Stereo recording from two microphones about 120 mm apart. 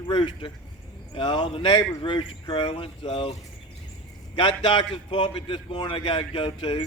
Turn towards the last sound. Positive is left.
turn(degrees=45)  # may be behind; listen again after turning